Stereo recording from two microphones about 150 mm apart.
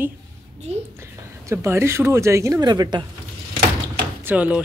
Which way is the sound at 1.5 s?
20° right (ahead or behind).